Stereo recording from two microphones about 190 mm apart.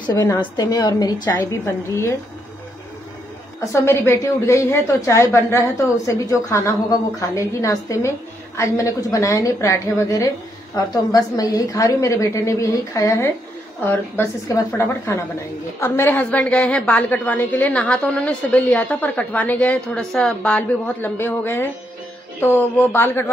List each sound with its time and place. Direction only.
0.0 s a woman's voice: 20° left (ahead or behind)
3.7 s a woman's voice: 15° left (ahead or behind)